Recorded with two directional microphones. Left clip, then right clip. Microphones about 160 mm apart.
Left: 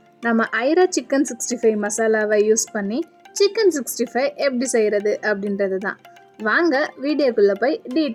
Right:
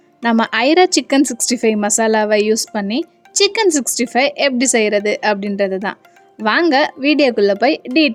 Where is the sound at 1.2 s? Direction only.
90° right.